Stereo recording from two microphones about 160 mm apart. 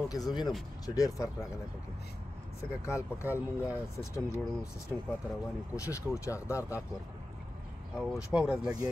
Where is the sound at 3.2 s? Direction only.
10° right (ahead or behind).